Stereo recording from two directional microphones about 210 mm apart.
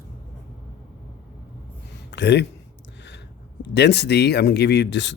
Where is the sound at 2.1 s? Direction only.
55° left (ahead or behind).